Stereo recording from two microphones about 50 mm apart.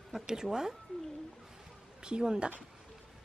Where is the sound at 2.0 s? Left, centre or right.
Centre.